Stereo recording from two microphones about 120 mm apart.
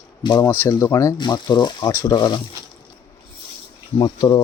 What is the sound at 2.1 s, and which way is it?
Speech, 35° left (ahead or behind).